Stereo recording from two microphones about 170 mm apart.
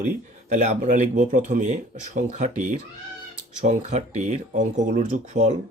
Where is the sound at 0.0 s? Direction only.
45° right (ahead or behind).